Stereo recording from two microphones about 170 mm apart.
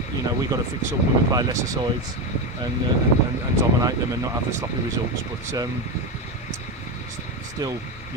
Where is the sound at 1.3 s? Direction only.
25° right (ahead or behind).